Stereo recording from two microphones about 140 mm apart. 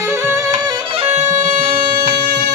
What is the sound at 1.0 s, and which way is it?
Bagpipes, 50° right (ahead or behind).